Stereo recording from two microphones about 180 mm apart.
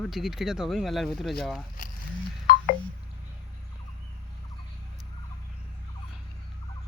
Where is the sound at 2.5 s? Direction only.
55° left (ahead or behind).